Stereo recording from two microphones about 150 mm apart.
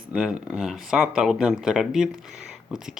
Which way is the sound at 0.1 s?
5° right (ahead or behind).